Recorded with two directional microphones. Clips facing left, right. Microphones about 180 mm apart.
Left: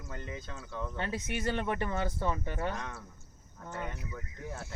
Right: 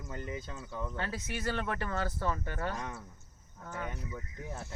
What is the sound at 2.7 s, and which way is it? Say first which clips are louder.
Speech: right 1 dB; 15° right (ahead or behind).